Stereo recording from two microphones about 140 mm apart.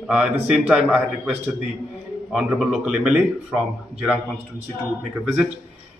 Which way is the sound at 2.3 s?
5° right (ahead or behind).